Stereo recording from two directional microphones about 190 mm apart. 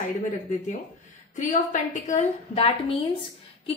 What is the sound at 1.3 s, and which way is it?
A woman's voice, 40° left (ahead or behind).